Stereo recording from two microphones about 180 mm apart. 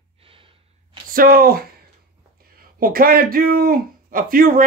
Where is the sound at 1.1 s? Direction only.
55° right (ahead or behind).